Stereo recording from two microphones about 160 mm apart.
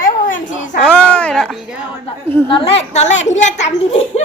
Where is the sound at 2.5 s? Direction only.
40° left (ahead or behind).